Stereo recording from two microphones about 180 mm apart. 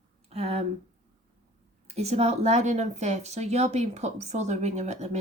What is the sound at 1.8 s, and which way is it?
A woman's voice, 35° right (ahead or behind).